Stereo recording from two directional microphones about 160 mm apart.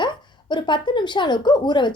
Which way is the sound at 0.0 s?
30° left (ahead or behind).